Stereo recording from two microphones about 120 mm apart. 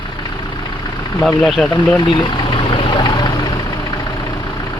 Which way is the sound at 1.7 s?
40° left (ahead or behind).